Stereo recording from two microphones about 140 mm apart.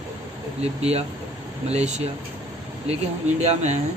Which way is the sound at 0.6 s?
50° right (ahead or behind).